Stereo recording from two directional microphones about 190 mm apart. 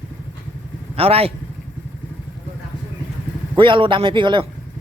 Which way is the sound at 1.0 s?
30° right (ahead or behind).